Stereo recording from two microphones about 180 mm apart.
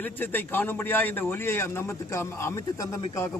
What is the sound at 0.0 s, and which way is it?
A man's voice, 10° left (ahead or behind).